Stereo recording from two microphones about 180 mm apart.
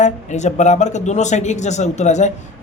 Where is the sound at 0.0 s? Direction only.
40° left (ahead or behind).